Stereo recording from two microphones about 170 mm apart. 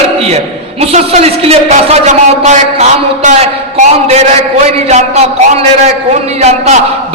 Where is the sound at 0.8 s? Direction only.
40° right (ahead or behind).